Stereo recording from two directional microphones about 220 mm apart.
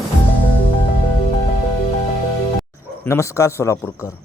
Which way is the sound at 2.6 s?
10° left (ahead or behind).